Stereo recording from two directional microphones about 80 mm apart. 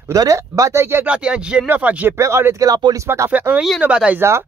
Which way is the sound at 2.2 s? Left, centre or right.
Right.